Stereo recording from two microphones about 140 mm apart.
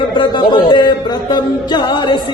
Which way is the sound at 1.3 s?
30° left (ahead or behind).